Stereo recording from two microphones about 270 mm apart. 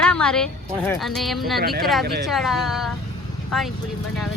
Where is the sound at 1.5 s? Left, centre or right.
Right.